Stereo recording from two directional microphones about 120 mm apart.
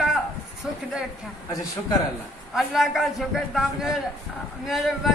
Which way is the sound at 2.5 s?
Centre (ahead or behind).